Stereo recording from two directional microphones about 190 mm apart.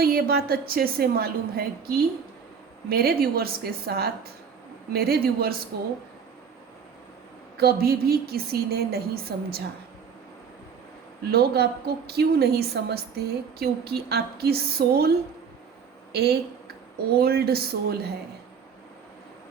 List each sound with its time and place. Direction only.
0.0 s a woman's voice: 55° right (ahead or behind)
7.5 s a woman's voice: 55° right (ahead or behind)
11.3 s a woman's voice: 55° right (ahead or behind)
16.1 s a woman's voice: 60° right (ahead or behind)